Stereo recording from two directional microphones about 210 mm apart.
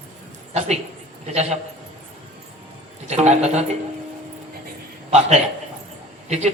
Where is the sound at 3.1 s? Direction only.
30° right (ahead or behind).